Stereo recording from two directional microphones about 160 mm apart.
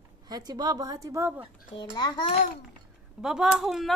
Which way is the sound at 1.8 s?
25° left (ahead or behind).